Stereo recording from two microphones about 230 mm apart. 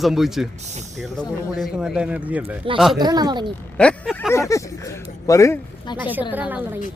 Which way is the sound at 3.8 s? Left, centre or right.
Centre.